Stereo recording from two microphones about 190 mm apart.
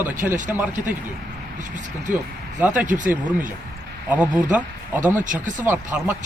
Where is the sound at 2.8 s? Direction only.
45° right (ahead or behind).